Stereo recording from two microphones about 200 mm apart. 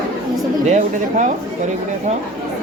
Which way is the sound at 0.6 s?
35° right (ahead or behind).